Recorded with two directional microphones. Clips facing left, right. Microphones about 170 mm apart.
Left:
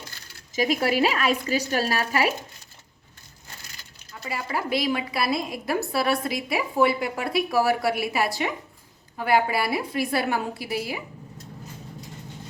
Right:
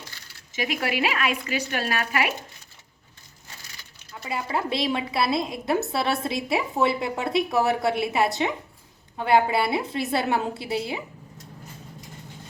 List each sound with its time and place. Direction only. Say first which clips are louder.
0.5 s speech: left 4 dB; 40° left (ahead or behind)
4.2 s a woman's voice: right 2 dB; 25° right (ahead or behind)